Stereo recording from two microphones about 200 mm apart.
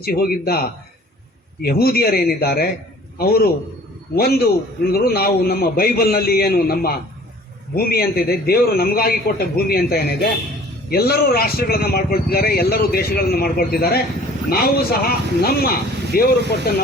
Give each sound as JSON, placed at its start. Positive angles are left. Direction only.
{"t": 0.0, "sound": "a man's voice", "side_deg": 50}